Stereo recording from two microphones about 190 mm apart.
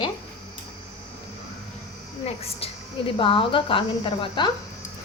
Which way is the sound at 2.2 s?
30° left (ahead or behind).